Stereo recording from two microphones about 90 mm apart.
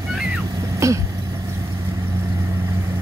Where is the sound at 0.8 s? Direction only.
35° right (ahead or behind).